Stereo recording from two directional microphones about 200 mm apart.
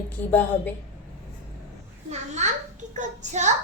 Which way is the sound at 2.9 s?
35° right (ahead or behind).